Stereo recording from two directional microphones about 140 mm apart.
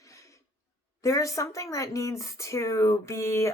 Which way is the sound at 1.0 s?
20° left (ahead or behind).